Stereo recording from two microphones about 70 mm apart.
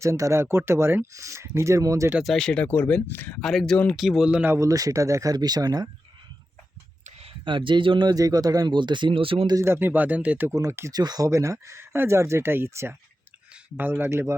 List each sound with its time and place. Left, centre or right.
0.0 s speech: right
1.1 s speech: right
2.2 s speech: centre
2.6 s speech: left
3.4 s speech: centre
4.4 s speech: right
5.3 s speech: right
7.9 s speech: right
9.6 s speech: right
10.5 s speech: right
10.9 s speech: right
11.3 s speech: right